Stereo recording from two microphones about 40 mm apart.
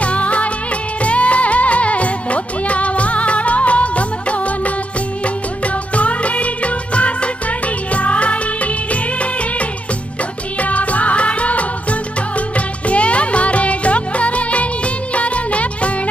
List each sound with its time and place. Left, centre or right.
0.0 s music of bollywood: left
1.0 s music: left
5.9 s music of bollywood: left
10.6 s music: left
15.1 s music of bollywood: left